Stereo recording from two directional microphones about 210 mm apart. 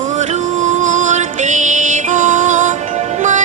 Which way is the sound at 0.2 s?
35° right (ahead or behind).